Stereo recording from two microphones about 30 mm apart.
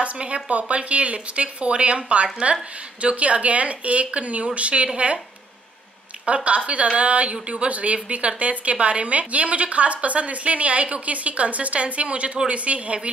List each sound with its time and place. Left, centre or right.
0.2 s a woman's voice: right
6.2 s a woman's voice: right